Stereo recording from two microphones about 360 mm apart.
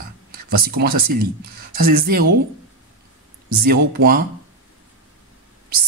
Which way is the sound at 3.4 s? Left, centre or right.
Right.